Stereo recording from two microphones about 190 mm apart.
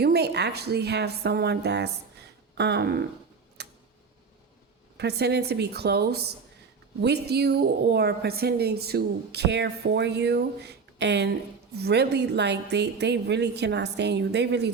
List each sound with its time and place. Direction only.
0.0 s a woman's voice: 60° right (ahead or behind)
3.6 s tick-tock: 60° right (ahead or behind)
4.9 s a woman's voice: 60° right (ahead or behind)